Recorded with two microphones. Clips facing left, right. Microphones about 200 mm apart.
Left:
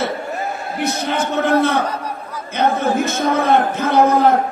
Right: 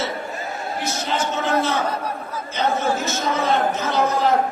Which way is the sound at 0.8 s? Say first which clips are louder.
Left 5 dB; 60° left (ahead or behind).